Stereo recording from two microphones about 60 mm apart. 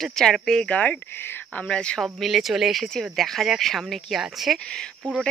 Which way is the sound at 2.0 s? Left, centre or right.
Centre.